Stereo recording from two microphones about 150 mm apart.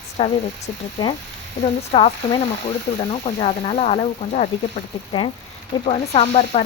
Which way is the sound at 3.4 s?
35° left (ahead or behind).